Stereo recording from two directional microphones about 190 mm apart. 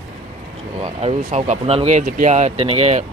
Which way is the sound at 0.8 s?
35° right (ahead or behind).